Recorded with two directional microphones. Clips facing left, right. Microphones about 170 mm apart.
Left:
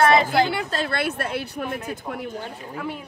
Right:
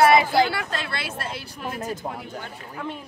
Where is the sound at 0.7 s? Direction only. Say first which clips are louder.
Left 6 dB; 45° left (ahead or behind).